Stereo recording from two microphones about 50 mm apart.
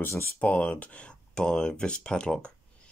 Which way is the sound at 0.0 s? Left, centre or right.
Left.